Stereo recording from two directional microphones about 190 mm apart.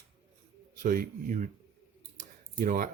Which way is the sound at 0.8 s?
45° right (ahead or behind).